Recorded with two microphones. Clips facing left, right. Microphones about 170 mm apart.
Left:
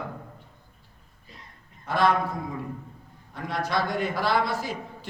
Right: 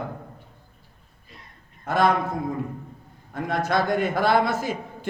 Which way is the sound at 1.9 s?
50° right (ahead or behind).